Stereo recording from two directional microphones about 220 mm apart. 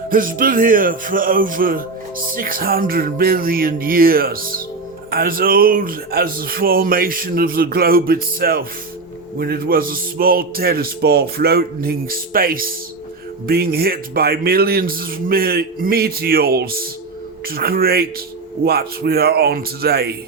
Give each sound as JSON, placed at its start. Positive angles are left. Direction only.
{"t": 0.1, "sound": "a man's voice", "side_deg": -40}